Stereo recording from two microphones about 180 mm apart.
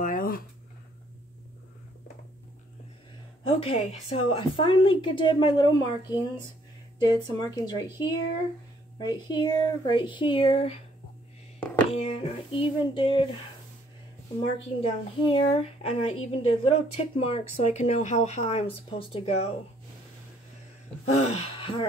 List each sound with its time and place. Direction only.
0.0 s a sound: 50° left (ahead or behind)
3.4 s a woman's voice: 35° left (ahead or behind)
7.0 s a woman's voice: 25° left (ahead or behind)
11.9 s a woman's voice: 35° left (ahead or behind)
14.4 s a woman's voice: 30° left (ahead or behind)
21.0 s speech: 35° left (ahead or behind)